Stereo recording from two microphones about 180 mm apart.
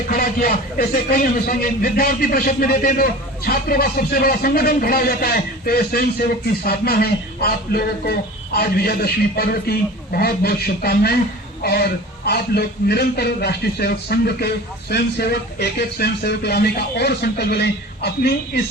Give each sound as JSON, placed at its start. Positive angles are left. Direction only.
{"t": 0.1, "sound": "speech", "side_deg": 55}